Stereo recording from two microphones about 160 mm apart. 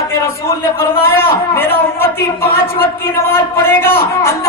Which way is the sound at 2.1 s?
70° left (ahead or behind).